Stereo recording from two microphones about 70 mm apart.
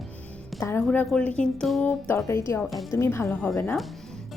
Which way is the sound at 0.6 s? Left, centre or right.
Left.